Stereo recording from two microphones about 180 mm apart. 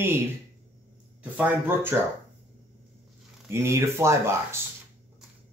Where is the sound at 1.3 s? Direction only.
10° right (ahead or behind).